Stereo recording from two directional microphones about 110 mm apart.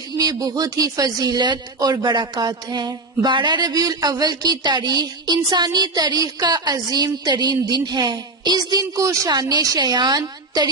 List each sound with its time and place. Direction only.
0.2 s speech: 35° right (ahead or behind)